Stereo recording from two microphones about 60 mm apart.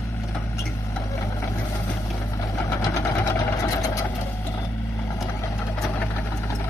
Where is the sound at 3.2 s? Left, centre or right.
Left.